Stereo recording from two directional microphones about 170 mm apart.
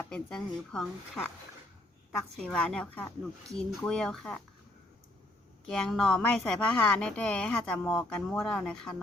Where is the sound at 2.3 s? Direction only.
5° left (ahead or behind).